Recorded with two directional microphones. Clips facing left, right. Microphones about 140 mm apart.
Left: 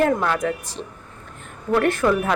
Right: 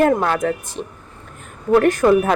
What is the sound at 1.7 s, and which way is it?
Speech, 40° right (ahead or behind).